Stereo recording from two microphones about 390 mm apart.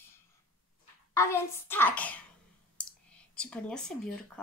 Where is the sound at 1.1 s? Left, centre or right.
Centre.